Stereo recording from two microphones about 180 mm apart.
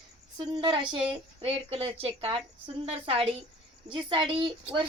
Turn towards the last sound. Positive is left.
turn(degrees=-25)  # may be behind; listen again after turning